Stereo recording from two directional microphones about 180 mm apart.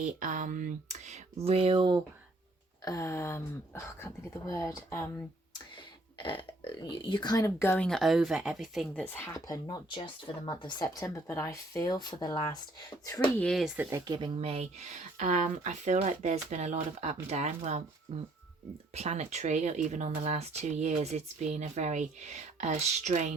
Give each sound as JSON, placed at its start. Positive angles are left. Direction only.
{"t": 0.0, "sound": "speech", "side_deg": -45}
{"t": 2.8, "sound": "speech", "side_deg": 15}
{"t": 6.2, "sound": "speech", "side_deg": 25}
{"t": 13.4, "sound": "speech", "side_deg": 0}
{"t": 13.9, "sound": "speech", "side_deg": -25}